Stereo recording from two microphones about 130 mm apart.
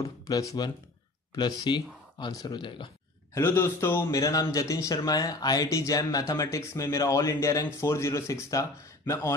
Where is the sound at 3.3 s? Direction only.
20° left (ahead or behind).